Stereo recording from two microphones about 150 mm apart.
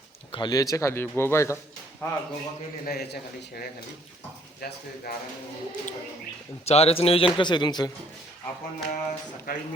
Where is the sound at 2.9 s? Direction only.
90° left.